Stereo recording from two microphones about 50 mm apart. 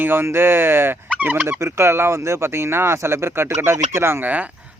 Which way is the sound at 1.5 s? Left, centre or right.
Right.